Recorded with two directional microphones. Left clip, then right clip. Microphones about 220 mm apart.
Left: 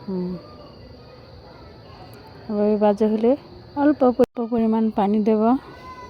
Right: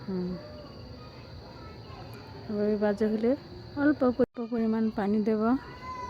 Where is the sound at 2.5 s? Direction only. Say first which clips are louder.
Left 9 dB; 20° left (ahead or behind).